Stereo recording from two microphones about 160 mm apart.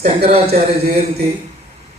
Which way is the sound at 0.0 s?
70° right (ahead or behind).